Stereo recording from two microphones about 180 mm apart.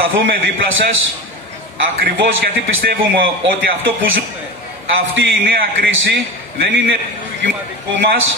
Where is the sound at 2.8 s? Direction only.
55° right (ahead or behind).